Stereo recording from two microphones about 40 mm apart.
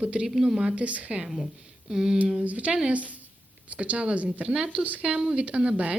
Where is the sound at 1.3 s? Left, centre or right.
Centre.